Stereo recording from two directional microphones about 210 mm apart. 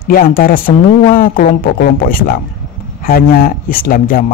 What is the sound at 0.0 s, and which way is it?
A man's voice, 45° left (ahead or behind).